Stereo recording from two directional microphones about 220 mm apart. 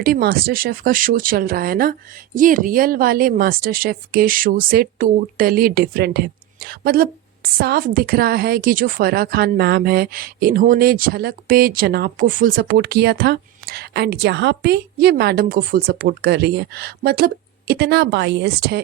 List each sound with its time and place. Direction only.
0.0 s speech: 45° right (ahead or behind)